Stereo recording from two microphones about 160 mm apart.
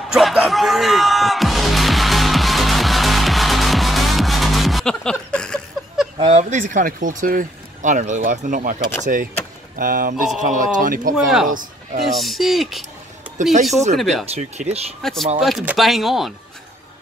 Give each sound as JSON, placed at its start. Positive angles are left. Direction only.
{"t": 0.1, "sound": "music", "side_deg": -5}
{"t": 6.1, "sound": "speech", "side_deg": -40}
{"t": 11.1, "sound": "speech", "side_deg": 0}
{"t": 13.9, "sound": "speech", "side_deg": 0}
{"t": 14.2, "sound": "speech", "side_deg": -40}
{"t": 15.0, "sound": "speech", "side_deg": 0}